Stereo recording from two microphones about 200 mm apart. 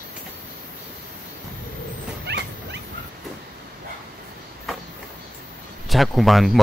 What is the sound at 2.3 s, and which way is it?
Dog, 60° right (ahead or behind).